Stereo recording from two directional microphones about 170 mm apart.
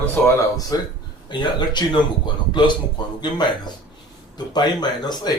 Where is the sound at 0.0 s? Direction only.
20° left (ahead or behind).